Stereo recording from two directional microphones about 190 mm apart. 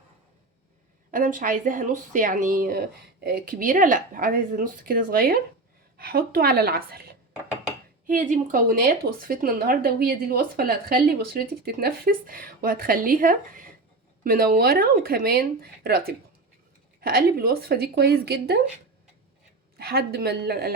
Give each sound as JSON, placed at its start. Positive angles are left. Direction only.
{"t": 1.1, "sound": "speech", "side_deg": -45}
{"t": 8.0, "sound": "a woman's voice", "side_deg": -45}
{"t": 19.7, "sound": "a woman's voice", "side_deg": -55}